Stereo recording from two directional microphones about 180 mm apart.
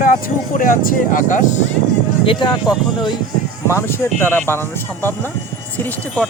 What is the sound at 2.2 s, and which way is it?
Speech, 30° left (ahead or behind).